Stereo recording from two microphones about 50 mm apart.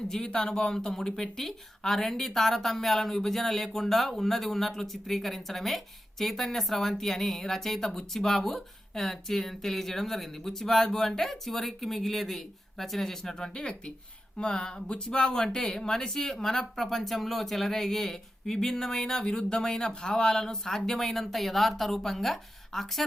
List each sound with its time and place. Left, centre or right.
0.1 s speech: centre